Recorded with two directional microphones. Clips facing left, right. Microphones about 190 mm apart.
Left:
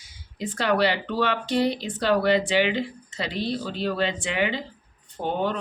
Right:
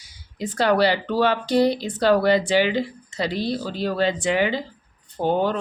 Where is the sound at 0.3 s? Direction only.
40° right (ahead or behind).